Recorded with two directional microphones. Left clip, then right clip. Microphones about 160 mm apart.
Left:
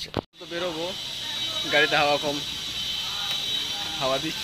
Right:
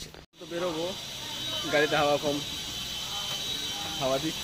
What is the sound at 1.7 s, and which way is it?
Speech, centre (ahead or behind).